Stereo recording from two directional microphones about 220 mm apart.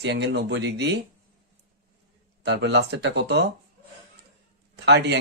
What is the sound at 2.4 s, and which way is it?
Speech, 50° right (ahead or behind).